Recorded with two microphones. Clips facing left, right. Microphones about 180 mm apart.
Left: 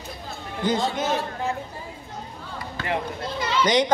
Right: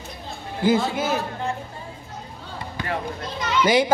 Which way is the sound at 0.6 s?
5° right (ahead or behind).